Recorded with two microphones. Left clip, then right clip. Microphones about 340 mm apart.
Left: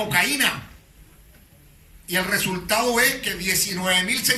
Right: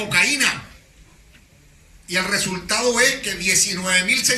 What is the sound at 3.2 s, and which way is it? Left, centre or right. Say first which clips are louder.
A man's voice: right 4 dB; left.